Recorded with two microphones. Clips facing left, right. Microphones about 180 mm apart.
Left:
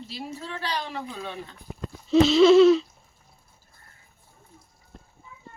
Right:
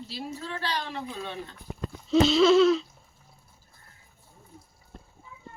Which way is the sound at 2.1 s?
Centre (ahead or behind).